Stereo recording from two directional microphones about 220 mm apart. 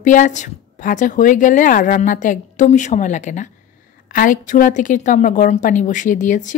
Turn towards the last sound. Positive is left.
turn(degrees=35)  # may be behind; listen again after turning